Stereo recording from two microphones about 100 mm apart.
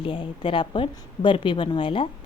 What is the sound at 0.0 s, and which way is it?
A woman's voice, 60° left (ahead or behind).